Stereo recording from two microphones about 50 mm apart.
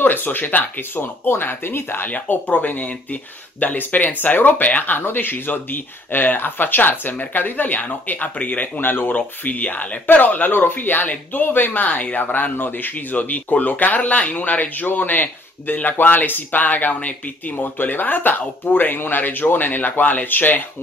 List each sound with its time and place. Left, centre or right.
0.0 s speech: left
2.0 s speech: left